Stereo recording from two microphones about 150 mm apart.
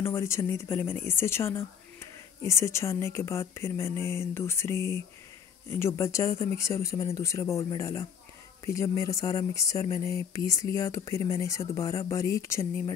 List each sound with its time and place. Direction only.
0.1 s a woman's voice: 20° left (ahead or behind)